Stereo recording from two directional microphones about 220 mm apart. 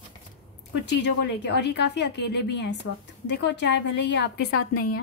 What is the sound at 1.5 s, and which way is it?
A woman's voice, 50° left (ahead or behind).